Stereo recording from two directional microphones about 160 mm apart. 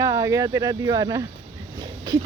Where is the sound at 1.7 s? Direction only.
25° right (ahead or behind).